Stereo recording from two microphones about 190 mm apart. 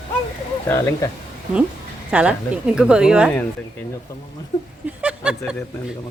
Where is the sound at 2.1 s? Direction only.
5° right (ahead or behind).